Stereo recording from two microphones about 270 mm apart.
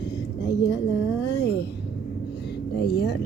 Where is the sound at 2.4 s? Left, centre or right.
Left.